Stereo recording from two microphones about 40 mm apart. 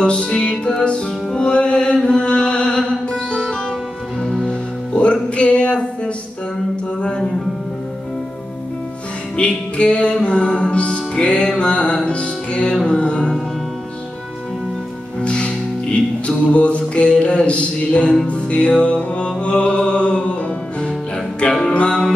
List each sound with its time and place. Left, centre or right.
0.0 s music: left
4.2 s music: centre
4.5 s music: left
7.0 s music: centre
9.4 s music: left
15.1 s music: left
21.5 s music: centre
21.7 s music: left